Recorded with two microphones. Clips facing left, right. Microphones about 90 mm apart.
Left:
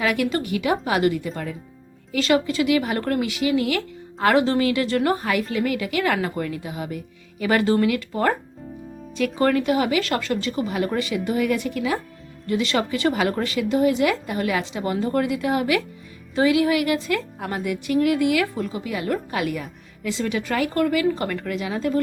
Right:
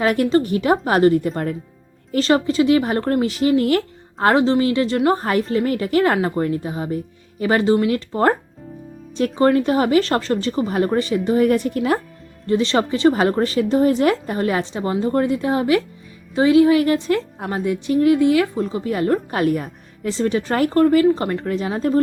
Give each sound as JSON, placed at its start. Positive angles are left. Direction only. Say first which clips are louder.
{"t": 0.0, "sound": "a woman's voice", "louder": "right 6 dB", "side_deg": -40}
{"t": 2.1, "sound": "a woman's voice", "louder": "right 4 dB", "side_deg": -35}
{"t": 5.1, "sound": "a woman's voice", "louder": "right 4 dB", "side_deg": -35}
{"t": 12.5, "sound": "a woman's voice", "louder": "right 4 dB", "side_deg": -30}